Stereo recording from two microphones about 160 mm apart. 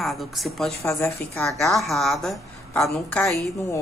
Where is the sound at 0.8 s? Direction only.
15° left (ahead or behind).